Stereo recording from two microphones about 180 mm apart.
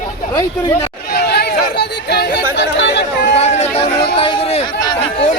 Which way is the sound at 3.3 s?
35° left (ahead or behind).